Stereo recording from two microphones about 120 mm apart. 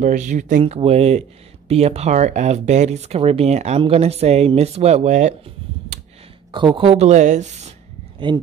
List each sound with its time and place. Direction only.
0.0 s speech: 90° right
0.7 s speech: 60° right (ahead or behind); by 5.3 s 75° right (ahead or behind)
6.5 s speech: 40° right (ahead or behind); by 7.7 s 85° right